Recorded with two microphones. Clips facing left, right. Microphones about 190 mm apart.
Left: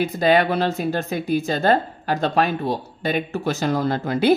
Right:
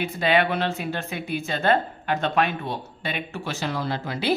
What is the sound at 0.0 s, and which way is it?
Speech, 40° left (ahead or behind).